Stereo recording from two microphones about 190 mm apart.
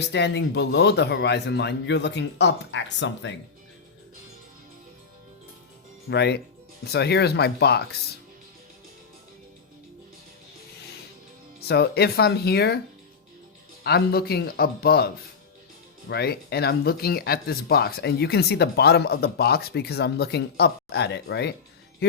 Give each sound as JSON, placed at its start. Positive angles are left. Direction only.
{"t": 0.0, "sound": "speech", "side_deg": 65}
{"t": 6.1, "sound": "speech", "side_deg": 60}
{"t": 11.7, "sound": "speech", "side_deg": 60}
{"t": 13.8, "sound": "speech", "side_deg": 55}